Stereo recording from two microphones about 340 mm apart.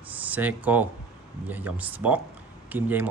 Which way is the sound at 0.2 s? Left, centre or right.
Centre.